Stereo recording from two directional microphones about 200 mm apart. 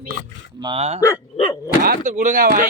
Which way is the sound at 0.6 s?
30° right (ahead or behind).